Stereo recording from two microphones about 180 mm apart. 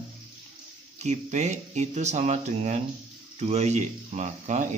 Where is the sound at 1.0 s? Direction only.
40° right (ahead or behind).